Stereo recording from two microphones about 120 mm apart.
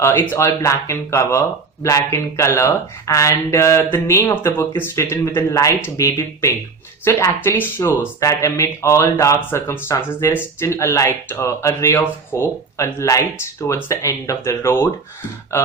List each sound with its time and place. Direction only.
0.0 s speech: 20° left (ahead or behind)